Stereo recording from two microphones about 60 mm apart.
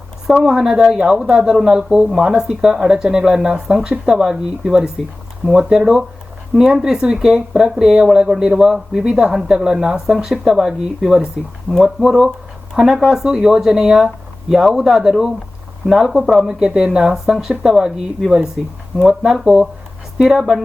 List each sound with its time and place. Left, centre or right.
0.4 s speech: centre